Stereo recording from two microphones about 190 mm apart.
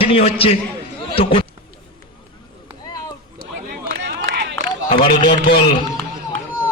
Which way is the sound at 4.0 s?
65° right (ahead or behind).